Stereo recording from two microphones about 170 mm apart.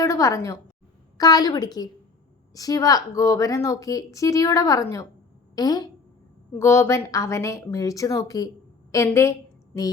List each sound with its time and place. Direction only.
0.0 s a woman's voice: 20° left (ahead or behind)